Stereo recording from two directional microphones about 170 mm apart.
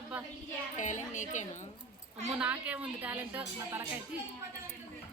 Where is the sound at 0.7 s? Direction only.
45° left (ahead or behind).